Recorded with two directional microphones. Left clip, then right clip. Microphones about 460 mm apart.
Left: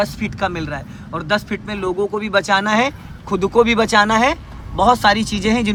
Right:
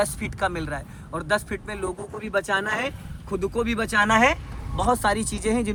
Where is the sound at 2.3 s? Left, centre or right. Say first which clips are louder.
Left 7 dB; left.